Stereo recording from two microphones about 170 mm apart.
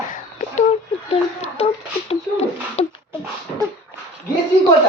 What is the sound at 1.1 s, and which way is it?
Speech, 35° left (ahead or behind).